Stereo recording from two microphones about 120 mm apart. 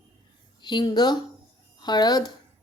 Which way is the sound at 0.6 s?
40° left (ahead or behind).